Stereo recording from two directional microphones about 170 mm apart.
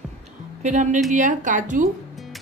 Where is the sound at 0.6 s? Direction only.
50° right (ahead or behind).